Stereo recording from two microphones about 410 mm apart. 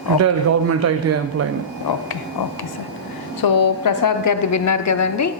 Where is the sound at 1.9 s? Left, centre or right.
Left.